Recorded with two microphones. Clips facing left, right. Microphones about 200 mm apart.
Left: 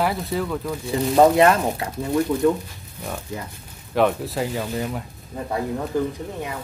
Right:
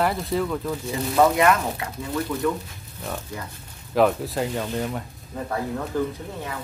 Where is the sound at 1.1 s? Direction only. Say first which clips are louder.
Left 4 dB; 30° left (ahead or behind).